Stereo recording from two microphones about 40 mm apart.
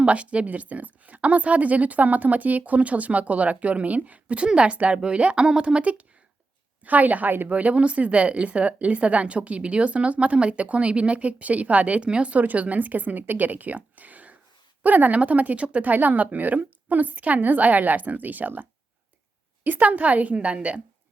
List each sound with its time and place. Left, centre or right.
0.0 s a woman's voice: right
12.0 s a woman's voice: right
12.4 s a woman's voice: right
15.8 s a woman's voice: right